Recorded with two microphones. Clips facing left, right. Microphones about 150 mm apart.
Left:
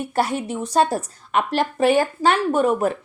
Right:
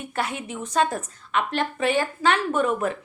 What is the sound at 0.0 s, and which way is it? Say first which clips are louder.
Speech: left 7 dB; 35° left (ahead or behind).